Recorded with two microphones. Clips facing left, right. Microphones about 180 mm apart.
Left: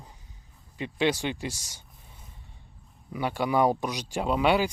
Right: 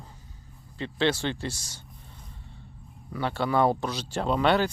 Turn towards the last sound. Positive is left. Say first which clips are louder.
# even
turn(degrees=10)  # may be behind; listen again after turning